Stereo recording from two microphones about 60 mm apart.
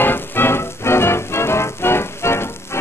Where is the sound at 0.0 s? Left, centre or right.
Left.